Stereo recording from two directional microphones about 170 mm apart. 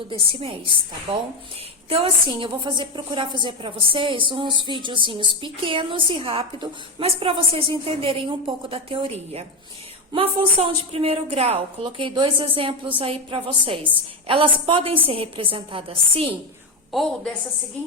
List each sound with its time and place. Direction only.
0.1 s a woman's voice: 35° right (ahead or behind)
1.9 s a woman's voice: 30° right (ahead or behind)
16.9 s a woman's voice: centre (ahead or behind)